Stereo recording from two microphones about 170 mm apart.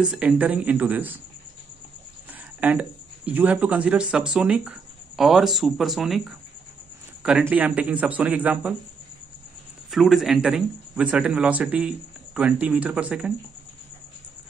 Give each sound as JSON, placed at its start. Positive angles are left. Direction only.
{"t": 0.0, "sound": "speech", "side_deg": -5}
{"t": 2.6, "sound": "speech", "side_deg": -10}
{"t": 9.8, "sound": "speech", "side_deg": 0}